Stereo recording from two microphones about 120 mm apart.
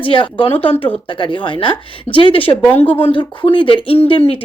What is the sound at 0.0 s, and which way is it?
A woman's voice, 45° left (ahead or behind).